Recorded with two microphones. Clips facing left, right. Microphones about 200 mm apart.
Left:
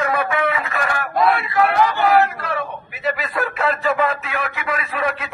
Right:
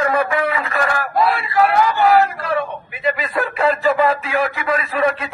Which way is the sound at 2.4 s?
Centre (ahead or behind).